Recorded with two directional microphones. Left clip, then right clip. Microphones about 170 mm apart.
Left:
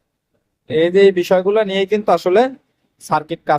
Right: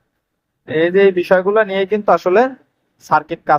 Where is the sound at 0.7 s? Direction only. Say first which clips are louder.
Even; 25° left (ahead or behind).